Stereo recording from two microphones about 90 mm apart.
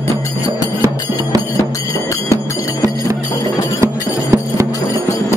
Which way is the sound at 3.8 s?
30° right (ahead or behind).